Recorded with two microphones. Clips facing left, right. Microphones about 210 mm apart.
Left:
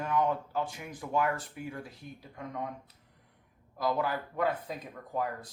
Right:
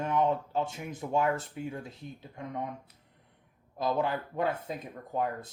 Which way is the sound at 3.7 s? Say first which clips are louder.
Right 1 dB; 25° right (ahead or behind).